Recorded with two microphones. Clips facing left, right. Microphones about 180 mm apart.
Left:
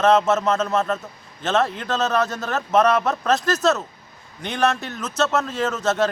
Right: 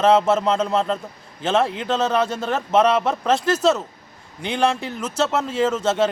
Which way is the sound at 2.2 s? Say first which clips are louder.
Right 2 dB; 30° right (ahead or behind).